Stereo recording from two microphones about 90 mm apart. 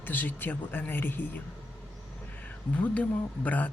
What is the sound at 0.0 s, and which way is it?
Speech, 20° left (ahead or behind).